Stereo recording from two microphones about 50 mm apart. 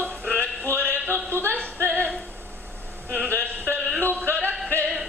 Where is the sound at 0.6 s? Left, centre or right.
Right.